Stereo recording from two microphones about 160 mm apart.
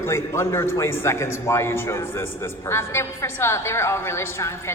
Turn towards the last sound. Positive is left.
turn(degrees=15)  # may be behind; listen again after turning